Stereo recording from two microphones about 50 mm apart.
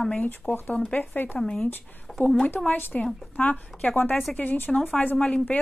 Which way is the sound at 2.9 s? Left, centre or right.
Centre.